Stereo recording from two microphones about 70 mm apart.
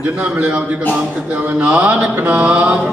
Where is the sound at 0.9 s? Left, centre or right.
Right.